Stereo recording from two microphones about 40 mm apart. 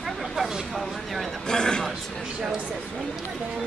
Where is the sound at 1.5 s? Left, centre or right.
Centre.